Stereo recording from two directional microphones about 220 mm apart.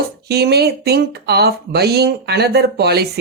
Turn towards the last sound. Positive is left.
turn(degrees=-45)  # may be behind; listen again after turning